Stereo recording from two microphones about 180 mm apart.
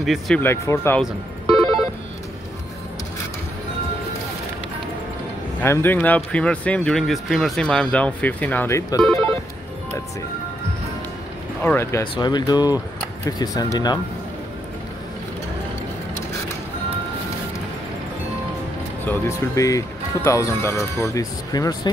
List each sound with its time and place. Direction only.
0.0 s speech: centre (ahead or behind)
0.4 s speech: 15° left (ahead or behind)
5.6 s speech: 10° left (ahead or behind)
11.6 s speech: 15° left (ahead or behind)
12.0 s speech: 25° left (ahead or behind)
19.0 s speech: 15° left (ahead or behind)